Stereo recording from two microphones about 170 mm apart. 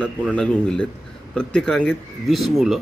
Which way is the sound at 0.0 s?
5° left (ahead or behind).